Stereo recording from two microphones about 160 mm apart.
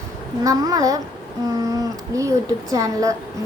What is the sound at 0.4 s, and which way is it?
A woman's voice, 20° right (ahead or behind).